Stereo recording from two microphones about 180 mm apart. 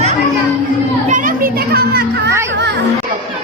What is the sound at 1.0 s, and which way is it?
Children playing, 45° right (ahead or behind).